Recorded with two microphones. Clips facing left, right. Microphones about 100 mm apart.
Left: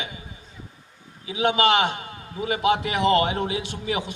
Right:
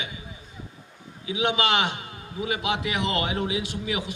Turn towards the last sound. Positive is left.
turn(degrees=35)  # may be behind; listen again after turning